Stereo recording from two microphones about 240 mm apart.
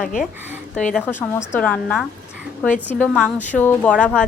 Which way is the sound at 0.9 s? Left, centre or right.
Centre.